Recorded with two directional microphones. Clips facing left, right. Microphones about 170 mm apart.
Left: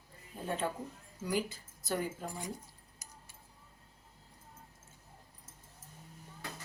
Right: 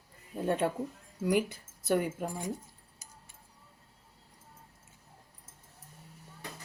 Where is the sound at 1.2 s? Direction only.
65° right (ahead or behind).